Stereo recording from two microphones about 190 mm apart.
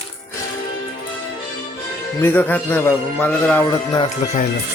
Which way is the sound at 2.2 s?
10° left (ahead or behind).